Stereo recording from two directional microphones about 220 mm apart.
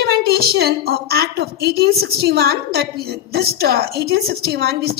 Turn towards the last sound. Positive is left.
turn(degrees=-45)  # may be behind; listen again after turning